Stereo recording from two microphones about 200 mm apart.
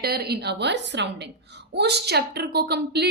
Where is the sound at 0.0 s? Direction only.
50° right (ahead or behind).